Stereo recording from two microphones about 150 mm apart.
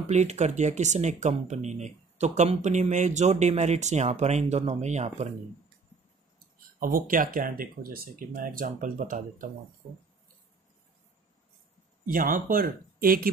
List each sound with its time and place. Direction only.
0.0 s speech: 50° right (ahead or behind)
6.8 s speech: 70° right (ahead or behind)
12.1 s speech: 65° right (ahead or behind)